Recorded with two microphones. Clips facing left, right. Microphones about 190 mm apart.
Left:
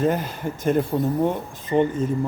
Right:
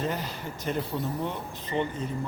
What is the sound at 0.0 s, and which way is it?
Speech, 50° left (ahead or behind).